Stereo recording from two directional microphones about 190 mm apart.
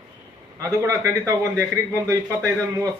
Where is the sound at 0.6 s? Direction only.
15° right (ahead or behind).